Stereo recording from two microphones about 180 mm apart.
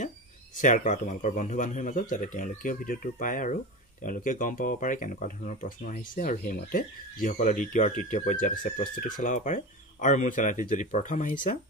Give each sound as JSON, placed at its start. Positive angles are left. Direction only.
{"t": 0.6, "sound": "speech", "side_deg": 45}